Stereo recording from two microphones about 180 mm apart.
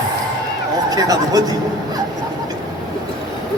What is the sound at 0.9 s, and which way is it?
Speech, 20° right (ahead or behind).